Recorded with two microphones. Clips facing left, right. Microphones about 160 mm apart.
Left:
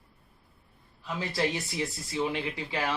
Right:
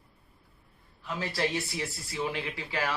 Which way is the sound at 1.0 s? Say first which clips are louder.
Left 1 dB; 20° left (ahead or behind).